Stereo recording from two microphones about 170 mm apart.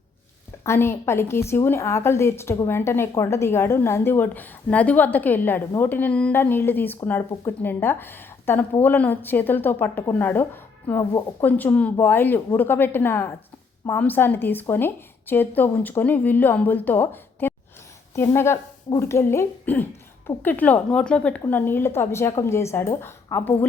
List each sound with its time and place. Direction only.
0.6 s a woman's voice: 15° left (ahead or behind)